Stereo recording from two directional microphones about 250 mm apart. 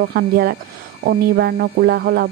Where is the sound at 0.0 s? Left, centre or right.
Right.